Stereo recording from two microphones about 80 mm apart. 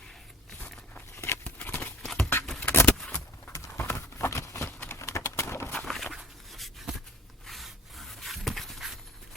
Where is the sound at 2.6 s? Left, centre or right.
Left.